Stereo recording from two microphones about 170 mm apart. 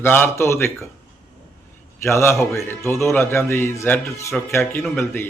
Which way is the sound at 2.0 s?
15° left (ahead or behind).